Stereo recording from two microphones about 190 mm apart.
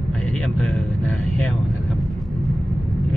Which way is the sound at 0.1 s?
5° left (ahead or behind).